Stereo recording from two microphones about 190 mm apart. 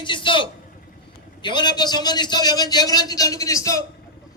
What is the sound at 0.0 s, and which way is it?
A man's voice, 25° left (ahead or behind).